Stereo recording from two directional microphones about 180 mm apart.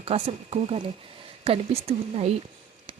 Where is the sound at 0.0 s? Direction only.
35° right (ahead or behind).